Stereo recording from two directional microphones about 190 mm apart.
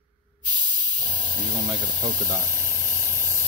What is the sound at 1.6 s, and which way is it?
Speech, 25° right (ahead or behind).